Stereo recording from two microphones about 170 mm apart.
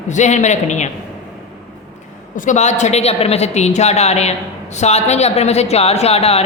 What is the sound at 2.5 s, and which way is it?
A woman's voice, 45° left (ahead or behind).